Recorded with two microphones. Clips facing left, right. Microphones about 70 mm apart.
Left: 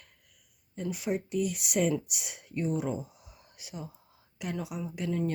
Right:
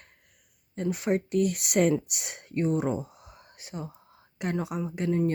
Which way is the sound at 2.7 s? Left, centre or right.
Right.